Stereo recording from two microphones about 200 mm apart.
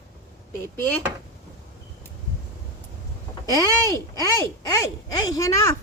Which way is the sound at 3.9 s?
15° left (ahead or behind).